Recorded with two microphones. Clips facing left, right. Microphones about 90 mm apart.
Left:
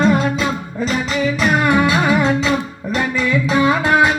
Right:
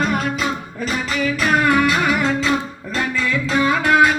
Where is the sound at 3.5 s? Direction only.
20° left (ahead or behind).